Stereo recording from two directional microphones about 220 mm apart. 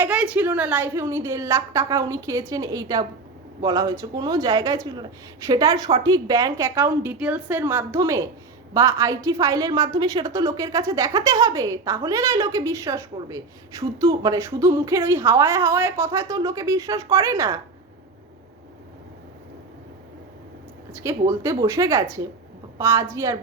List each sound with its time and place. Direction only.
0.0 s a woman's voice: 5° right (ahead or behind)
20.9 s a woman's voice: 10° right (ahead or behind)